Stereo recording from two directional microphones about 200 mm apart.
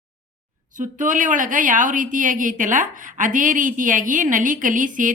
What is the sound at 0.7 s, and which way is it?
A woman's voice, 40° right (ahead or behind).